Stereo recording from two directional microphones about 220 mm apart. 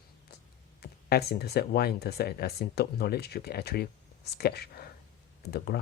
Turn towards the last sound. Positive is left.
turn(degrees=45)  # may be behind; listen again after turning